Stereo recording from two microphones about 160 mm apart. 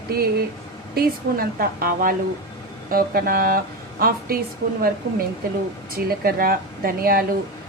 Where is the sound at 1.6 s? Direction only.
65° right (ahead or behind).